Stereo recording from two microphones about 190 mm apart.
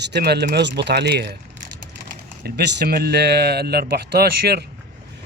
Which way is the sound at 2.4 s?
60° right (ahead or behind).